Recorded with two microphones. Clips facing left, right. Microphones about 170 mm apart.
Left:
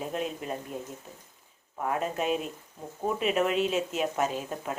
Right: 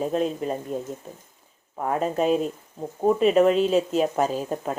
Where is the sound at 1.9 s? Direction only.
35° right (ahead or behind).